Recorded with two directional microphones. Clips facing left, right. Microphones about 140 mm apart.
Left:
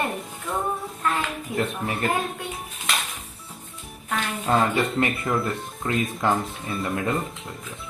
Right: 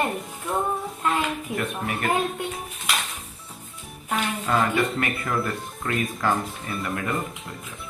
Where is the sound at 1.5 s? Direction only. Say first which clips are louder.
Left 6 dB; 30° left (ahead or behind).